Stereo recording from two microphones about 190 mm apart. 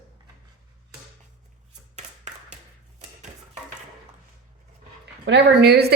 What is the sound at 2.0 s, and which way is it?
Tap, 40° right (ahead or behind).